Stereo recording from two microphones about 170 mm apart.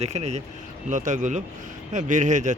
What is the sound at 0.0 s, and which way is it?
Speech, 40° right (ahead or behind).